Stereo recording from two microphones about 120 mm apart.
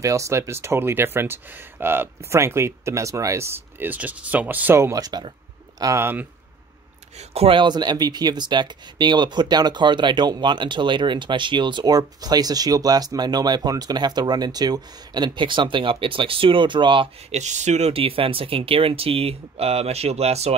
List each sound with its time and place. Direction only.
0.0 s speech: 25° right (ahead or behind)
7.2 s speech: 55° right (ahead or behind)
17.3 s speech: 75° right (ahead or behind); by 20.5 s 60° right (ahead or behind)